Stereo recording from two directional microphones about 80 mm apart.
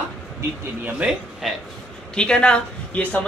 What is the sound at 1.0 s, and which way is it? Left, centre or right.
Speech, centre.